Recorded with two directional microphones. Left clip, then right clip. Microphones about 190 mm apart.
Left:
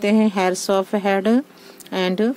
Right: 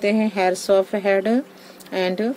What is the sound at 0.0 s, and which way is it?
Speech, 40° left (ahead or behind).